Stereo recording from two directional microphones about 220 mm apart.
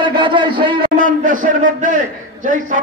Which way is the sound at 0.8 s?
35° right (ahead or behind).